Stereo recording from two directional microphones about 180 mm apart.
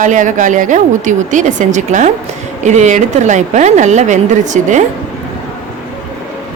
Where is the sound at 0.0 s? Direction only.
45° right (ahead or behind).